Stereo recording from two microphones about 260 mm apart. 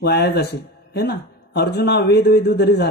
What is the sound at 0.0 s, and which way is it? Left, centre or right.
A man's voice, left.